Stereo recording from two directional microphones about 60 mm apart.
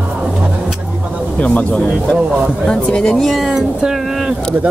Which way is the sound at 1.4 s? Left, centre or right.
Left.